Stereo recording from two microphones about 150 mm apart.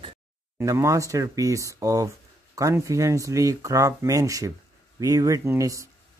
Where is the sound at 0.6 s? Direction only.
20° right (ahead or behind).